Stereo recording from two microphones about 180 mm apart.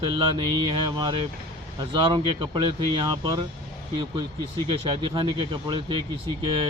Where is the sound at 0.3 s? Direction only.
25° right (ahead or behind).